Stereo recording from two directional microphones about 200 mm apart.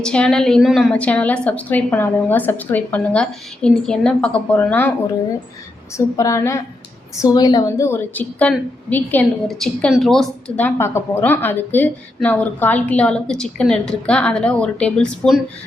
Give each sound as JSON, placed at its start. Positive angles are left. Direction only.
{"t": 0.0, "sound": "a woman's voice", "side_deg": 5}
{"t": 5.9, "sound": "a woman's voice", "side_deg": 15}